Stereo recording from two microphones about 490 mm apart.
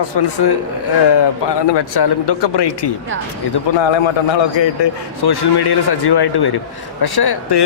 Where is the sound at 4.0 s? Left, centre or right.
Left.